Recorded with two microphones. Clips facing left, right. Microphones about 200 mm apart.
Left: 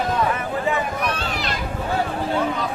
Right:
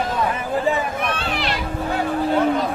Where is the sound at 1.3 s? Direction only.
45° left (ahead or behind).